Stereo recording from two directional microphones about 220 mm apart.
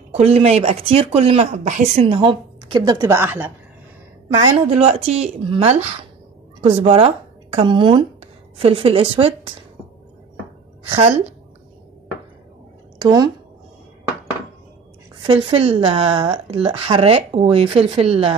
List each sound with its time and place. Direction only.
0.1 s speech: 30° right (ahead or behind); by 3.5 s 10° right (ahead or behind)
4.6 s a woman's voice: 25° right (ahead or behind)
10.9 s speech: 25° right (ahead or behind)
13.0 s speech: 15° right (ahead or behind)
15.2 s speech: 25° right (ahead or behind)